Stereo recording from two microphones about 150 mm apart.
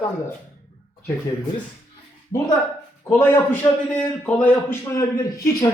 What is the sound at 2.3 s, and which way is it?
Speech, 25° left (ahead or behind).